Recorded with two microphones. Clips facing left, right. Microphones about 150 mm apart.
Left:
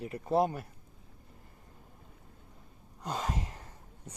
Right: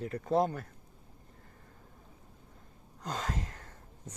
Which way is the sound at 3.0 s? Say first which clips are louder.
Left 1 dB; 10° left (ahead or behind).